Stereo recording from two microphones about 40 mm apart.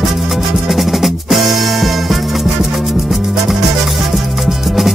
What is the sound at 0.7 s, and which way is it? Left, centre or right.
Music, centre.